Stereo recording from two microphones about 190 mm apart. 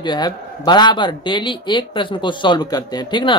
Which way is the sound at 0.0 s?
25° left (ahead or behind).